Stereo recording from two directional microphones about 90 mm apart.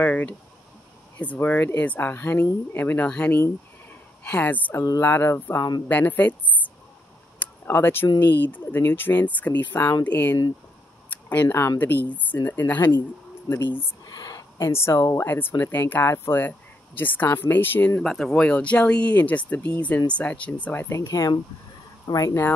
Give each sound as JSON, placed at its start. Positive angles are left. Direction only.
{"t": 0.0, "sound": "speech", "side_deg": 20}
{"t": 3.3, "sound": "a sound", "side_deg": 25}
{"t": 4.2, "sound": "speech", "side_deg": 15}
{"t": 5.9, "sound": "speech", "side_deg": 20}
{"t": 7.3, "sound": "a sound", "side_deg": 25}
{"t": 8.4, "sound": "speech", "side_deg": 20}
{"t": 11.1, "sound": "a sound", "side_deg": 20}
{"t": 11.4, "sound": "speech", "side_deg": 35}
{"t": 11.8, "sound": "speech", "side_deg": 20}
{"t": 14.0, "sound": "a sound", "side_deg": 45}
{"t": 14.7, "sound": "speech", "side_deg": 30}
{"t": 18.0, "sound": "speech", "side_deg": 5}